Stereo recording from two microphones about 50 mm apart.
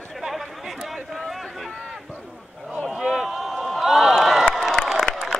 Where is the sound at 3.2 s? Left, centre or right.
Centre.